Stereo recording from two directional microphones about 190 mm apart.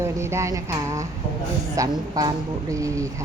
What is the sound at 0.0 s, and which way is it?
Speech, 15° right (ahead or behind).